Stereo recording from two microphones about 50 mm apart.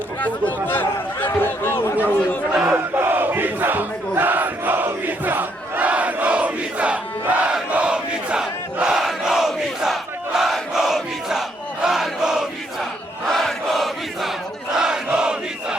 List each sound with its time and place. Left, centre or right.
0.2 s speech: left
2.6 s battle cry: right
4.1 s crowd: right; by 12.5 s centre
13.2 s a sound: centre
14.8 s crowd: centre